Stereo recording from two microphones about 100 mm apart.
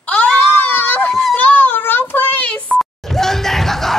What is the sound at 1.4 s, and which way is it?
Child singing, 15° left (ahead or behind).